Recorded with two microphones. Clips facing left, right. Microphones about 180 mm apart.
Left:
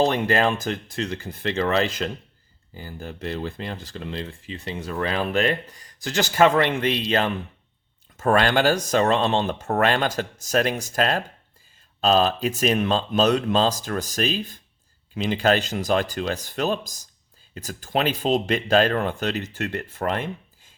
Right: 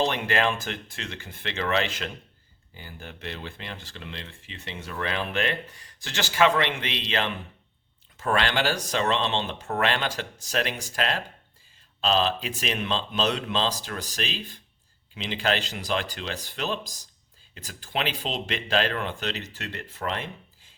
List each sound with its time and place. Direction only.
0.0 s speech: 40° left (ahead or behind)